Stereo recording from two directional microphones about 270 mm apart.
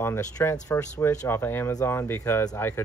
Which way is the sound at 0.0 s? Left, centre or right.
Centre.